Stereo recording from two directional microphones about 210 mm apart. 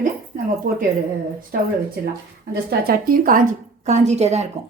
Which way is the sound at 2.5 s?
45° right (ahead or behind).